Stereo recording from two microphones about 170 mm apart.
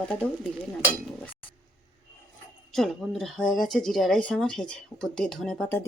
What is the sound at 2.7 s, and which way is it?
Speech, centre (ahead or behind).